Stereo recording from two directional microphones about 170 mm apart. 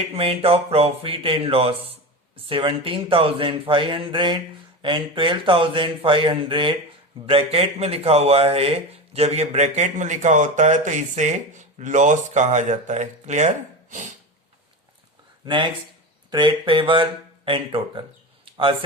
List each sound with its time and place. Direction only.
0.0 s a sound: 35° right (ahead or behind)
4.8 s speech: 30° right (ahead or behind)
16.3 s speech: 25° right (ahead or behind)